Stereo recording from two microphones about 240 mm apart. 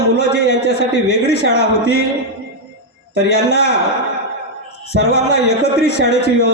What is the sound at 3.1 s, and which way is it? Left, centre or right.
Speech, left.